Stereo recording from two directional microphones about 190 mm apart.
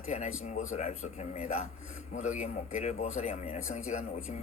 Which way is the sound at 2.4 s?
35° left (ahead or behind).